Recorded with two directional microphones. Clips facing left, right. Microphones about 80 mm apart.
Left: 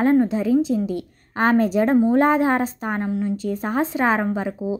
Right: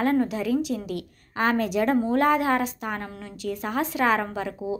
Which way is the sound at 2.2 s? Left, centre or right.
Left.